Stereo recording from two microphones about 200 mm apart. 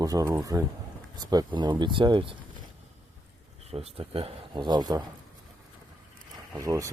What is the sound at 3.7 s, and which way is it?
Speech, 30° right (ahead or behind).